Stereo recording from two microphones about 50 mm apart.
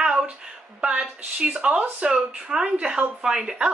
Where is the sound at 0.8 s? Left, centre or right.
Right.